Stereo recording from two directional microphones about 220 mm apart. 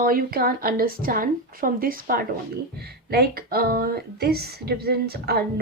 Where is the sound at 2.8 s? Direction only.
45° right (ahead or behind).